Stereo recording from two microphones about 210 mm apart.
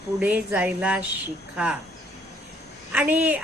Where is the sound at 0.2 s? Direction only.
5° right (ahead or behind).